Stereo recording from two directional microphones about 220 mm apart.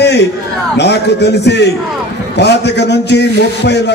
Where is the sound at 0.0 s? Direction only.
50° left (ahead or behind).